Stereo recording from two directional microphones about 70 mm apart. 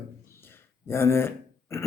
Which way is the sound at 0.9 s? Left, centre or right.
Left.